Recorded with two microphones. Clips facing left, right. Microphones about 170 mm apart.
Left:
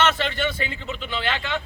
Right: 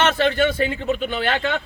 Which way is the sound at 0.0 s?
50° right (ahead or behind).